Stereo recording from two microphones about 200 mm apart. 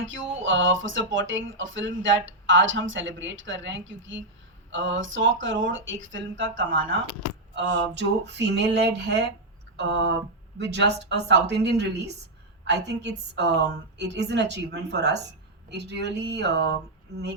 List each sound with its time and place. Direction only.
0.0 s speech: 75° right (ahead or behind)
7.5 s a woman's voice: 60° right (ahead or behind)